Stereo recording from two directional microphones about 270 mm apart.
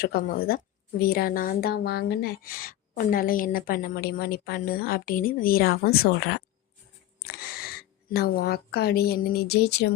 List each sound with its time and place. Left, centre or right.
0.0 s a woman's voice: left